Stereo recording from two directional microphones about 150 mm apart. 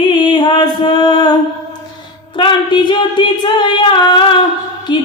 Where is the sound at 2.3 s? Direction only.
30° left (ahead or behind).